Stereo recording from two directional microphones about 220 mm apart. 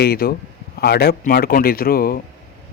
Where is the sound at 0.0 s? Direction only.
45° left (ahead or behind).